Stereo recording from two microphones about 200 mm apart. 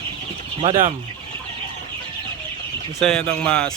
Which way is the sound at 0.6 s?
30° right (ahead or behind).